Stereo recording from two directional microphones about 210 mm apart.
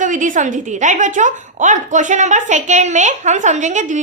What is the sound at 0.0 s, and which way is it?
A woman's voice, 35° right (ahead or behind).